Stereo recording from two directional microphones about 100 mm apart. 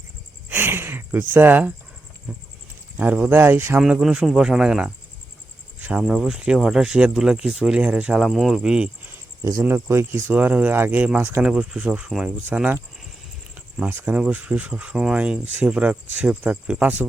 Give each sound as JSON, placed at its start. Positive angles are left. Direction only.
{"t": 0.4, "sound": "speech", "side_deg": -20}
{"t": 3.0, "sound": "speech", "side_deg": -15}
{"t": 3.8, "sound": "speech", "side_deg": -10}
{"t": 6.0, "sound": "speech", "side_deg": -5}
{"t": 9.4, "sound": "speech", "side_deg": -30}
{"t": 13.9, "sound": "speech", "side_deg": -15}